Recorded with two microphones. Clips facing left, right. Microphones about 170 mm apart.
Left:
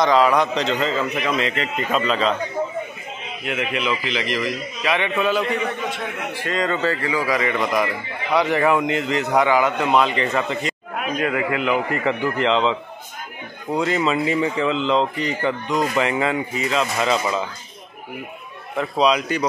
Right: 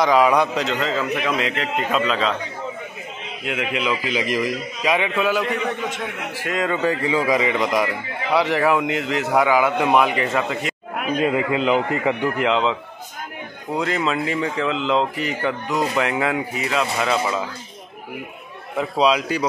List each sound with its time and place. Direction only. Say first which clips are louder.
0.0 s speech: even; 10° right (ahead or behind)
3.5 s a man's voice: even; 10° right (ahead or behind)
11.1 s a man's voice: right 2 dB; 20° right (ahead or behind)
12.4 s speech: left 3 dB; 5° right (ahead or behind)
18.8 s speech: even; 5° right (ahead or behind)